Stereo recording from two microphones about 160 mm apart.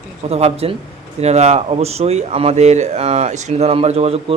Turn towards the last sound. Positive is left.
turn(degrees=-40)  # may be behind; listen again after turning